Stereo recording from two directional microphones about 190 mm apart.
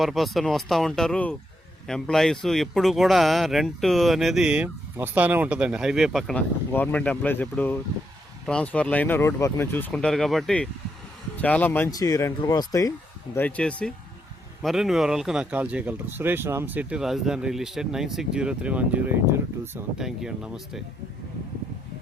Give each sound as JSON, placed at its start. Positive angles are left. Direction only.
{"t": 0.0, "sound": "speech", "side_deg": 0}
{"t": 11.9, "sound": "speech", "side_deg": 20}
{"t": 13.3, "sound": "speech", "side_deg": 10}